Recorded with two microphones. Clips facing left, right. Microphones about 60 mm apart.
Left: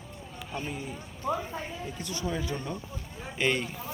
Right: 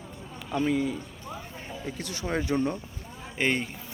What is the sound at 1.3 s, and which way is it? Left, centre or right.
Speech, left.